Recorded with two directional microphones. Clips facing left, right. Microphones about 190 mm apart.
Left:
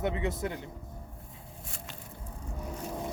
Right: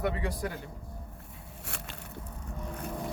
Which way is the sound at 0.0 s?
20° left (ahead or behind).